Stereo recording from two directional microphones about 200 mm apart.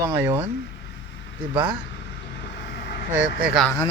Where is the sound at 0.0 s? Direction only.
10° right (ahead or behind).